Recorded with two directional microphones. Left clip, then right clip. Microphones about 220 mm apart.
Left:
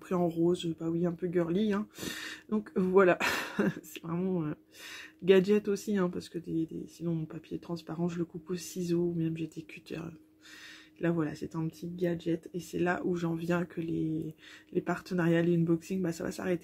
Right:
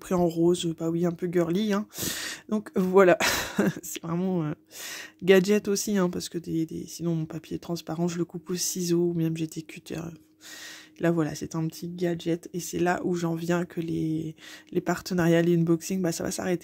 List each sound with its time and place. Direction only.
0.1 s speech: 40° right (ahead or behind)